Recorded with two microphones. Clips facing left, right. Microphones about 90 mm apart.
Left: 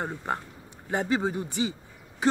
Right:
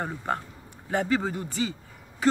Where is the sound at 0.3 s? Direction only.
20° left (ahead or behind).